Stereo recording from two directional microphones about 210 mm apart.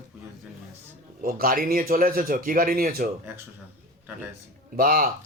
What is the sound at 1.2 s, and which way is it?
A man's voice, 45° right (ahead or behind).